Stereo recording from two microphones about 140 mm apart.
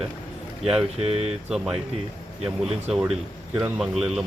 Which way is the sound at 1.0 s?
45° right (ahead or behind).